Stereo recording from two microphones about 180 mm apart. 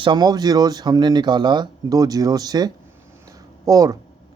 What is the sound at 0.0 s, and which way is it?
A man's voice, 25° right (ahead or behind).